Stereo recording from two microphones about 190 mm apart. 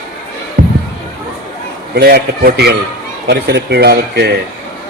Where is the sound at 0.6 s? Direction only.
50° right (ahead or behind).